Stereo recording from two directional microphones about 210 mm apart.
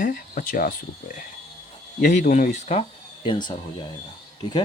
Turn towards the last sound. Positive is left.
turn(degrees=20)  # may be behind; listen again after turning